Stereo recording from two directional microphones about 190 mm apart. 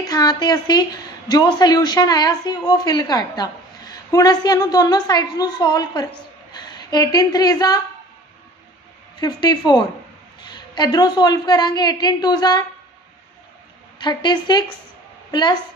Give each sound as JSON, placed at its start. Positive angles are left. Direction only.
{"t": 0.1, "sound": "a woman's voice", "side_deg": 20}
{"t": 9.2, "sound": "a woman's voice", "side_deg": 20}
{"t": 13.9, "sound": "a woman's voice", "side_deg": 25}